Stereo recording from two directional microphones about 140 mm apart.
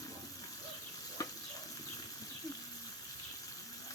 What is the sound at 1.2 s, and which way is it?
Sizzle, 25° left (ahead or behind).